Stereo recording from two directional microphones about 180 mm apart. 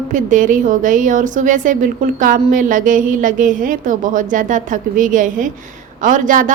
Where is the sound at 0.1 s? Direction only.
45° right (ahead or behind).